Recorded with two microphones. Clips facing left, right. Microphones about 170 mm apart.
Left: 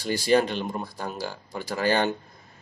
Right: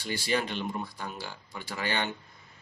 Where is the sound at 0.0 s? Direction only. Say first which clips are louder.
Left 9 dB; 40° left (ahead or behind).